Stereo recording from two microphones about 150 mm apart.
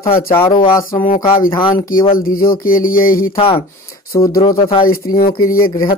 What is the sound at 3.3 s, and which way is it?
Speech, 40° left (ahead or behind).